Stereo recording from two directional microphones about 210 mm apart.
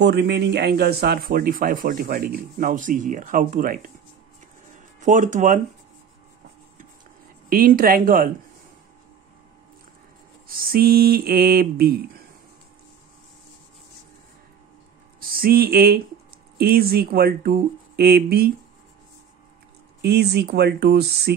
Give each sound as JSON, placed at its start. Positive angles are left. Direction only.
{"t": 0.0, "sound": "speech", "side_deg": -55}
{"t": 5.0, "sound": "speech", "side_deg": -35}
{"t": 7.4, "sound": "speech", "side_deg": -40}
{"t": 10.5, "sound": "speech", "side_deg": -45}
{"t": 15.1, "sound": "speech", "side_deg": -45}
{"t": 20.0, "sound": "speech", "side_deg": -50}